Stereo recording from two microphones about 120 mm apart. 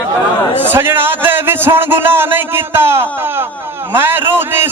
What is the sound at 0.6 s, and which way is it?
A man's voice, 20° right (ahead or behind).